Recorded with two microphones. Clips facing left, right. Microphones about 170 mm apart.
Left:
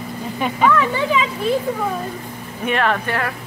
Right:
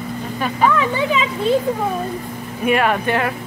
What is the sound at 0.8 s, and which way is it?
Speech, 20° right (ahead or behind).